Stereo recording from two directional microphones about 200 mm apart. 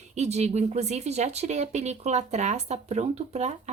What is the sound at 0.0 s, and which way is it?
Speech, 35° right (ahead or behind).